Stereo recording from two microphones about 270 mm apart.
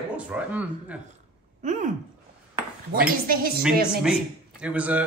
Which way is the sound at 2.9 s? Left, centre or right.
Right.